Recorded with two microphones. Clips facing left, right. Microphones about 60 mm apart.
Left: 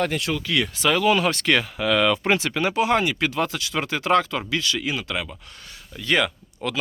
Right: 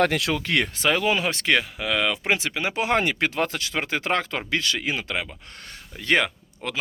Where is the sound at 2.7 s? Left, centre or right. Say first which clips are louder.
Left 1 dB; right.